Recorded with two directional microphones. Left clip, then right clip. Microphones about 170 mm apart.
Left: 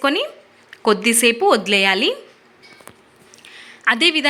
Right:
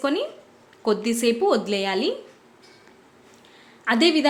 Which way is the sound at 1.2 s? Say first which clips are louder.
Left 4 dB; 15° left (ahead or behind).